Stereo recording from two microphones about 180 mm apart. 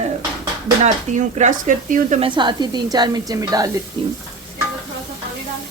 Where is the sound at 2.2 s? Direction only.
25° right (ahead or behind).